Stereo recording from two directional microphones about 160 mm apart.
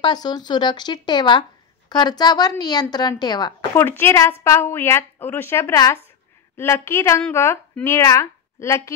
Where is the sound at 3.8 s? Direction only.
15° left (ahead or behind).